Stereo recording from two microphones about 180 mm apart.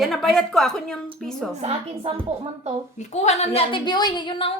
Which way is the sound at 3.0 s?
40° left (ahead or behind).